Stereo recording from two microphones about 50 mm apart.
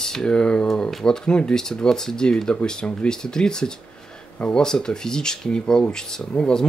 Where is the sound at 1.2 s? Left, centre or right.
Centre.